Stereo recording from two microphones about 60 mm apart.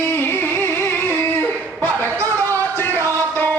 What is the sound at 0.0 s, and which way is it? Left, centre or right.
Music, left.